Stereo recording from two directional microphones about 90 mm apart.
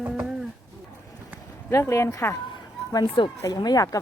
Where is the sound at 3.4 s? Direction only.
45° left (ahead or behind).